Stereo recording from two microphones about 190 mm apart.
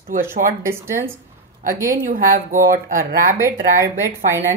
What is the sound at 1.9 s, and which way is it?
Speech, 45° right (ahead or behind).